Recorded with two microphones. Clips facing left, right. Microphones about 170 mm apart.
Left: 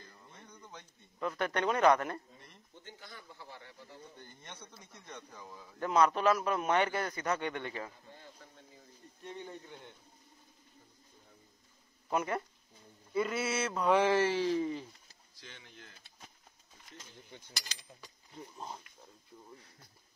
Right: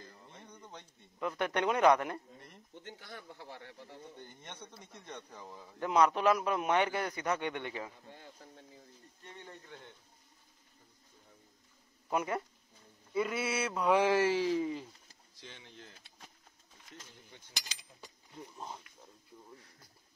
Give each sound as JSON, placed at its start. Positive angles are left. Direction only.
{"t": 0.3, "sound": "a sound", "side_deg": -25}
{"t": 1.2, "sound": "a man's voice", "side_deg": -10}
{"t": 2.8, "sound": "speech", "side_deg": -65}
{"t": 4.4, "sound": "a man's voice", "side_deg": -20}
{"t": 5.8, "sound": "a man's voice", "side_deg": -10}
{"t": 9.2, "sound": "speech", "side_deg": 15}
{"t": 12.1, "sound": "a man's voice", "side_deg": -10}
{"t": 13.1, "sound": "a sound", "side_deg": -5}
{"t": 13.6, "sound": "a man's voice", "side_deg": -10}
{"t": 15.4, "sound": "speech", "side_deg": -30}
{"t": 18.4, "sound": "a sound", "side_deg": 5}
{"t": 19.3, "sound": "a sound", "side_deg": -10}